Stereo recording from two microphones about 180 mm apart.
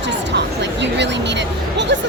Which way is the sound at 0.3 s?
75° right (ahead or behind).